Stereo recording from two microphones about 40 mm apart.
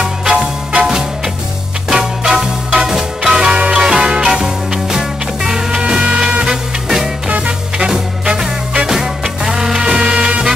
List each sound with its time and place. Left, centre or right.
0.3 s music: right
0.8 s music: centre
7.2 s music: right
7.7 s music: centre